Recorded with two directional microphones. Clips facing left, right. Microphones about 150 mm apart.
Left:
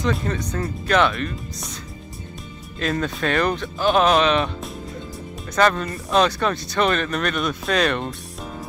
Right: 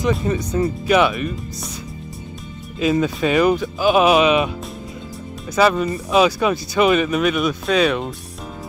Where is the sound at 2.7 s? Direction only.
5° right (ahead or behind).